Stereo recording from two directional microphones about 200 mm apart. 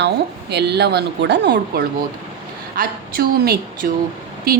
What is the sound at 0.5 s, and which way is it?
A woman's voice, 55° right (ahead or behind).